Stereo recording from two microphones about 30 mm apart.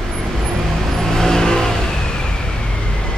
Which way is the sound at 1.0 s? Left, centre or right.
Centre.